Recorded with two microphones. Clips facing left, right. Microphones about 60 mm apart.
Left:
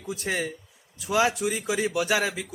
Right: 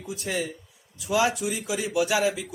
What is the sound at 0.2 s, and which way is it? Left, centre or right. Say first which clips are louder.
A man's voice: even; left.